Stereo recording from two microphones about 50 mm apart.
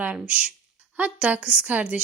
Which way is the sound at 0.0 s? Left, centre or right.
Right.